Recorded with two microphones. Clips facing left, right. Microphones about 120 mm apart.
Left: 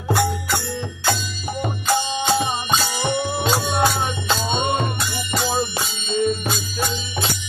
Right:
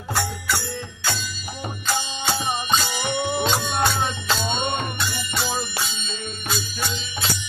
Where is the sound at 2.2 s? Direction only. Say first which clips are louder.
Left 4 dB; 30° left (ahead or behind).